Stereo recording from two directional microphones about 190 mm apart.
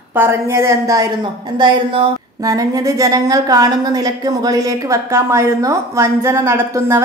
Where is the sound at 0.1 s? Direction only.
10° right (ahead or behind).